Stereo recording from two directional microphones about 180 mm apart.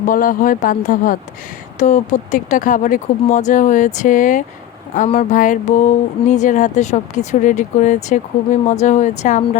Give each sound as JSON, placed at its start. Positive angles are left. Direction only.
{"t": 0.0, "sound": "speech", "side_deg": 50}